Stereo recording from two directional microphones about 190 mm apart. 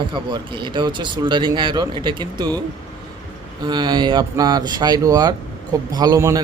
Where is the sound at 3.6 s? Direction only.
25° right (ahead or behind).